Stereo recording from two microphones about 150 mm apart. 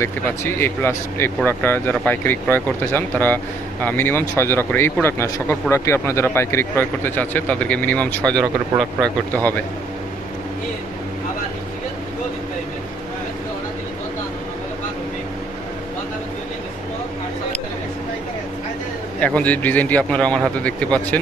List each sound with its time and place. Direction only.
0.0 s speech: 15° left (ahead or behind)
19.1 s speech: 10° left (ahead or behind)